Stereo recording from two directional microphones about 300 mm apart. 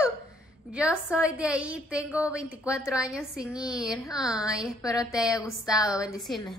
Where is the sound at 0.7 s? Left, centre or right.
Centre.